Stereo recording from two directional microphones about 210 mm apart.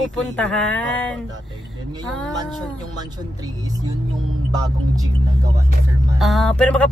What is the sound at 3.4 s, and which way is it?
Speech, 20° right (ahead or behind).